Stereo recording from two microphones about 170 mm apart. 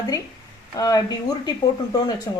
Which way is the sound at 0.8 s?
20° left (ahead or behind).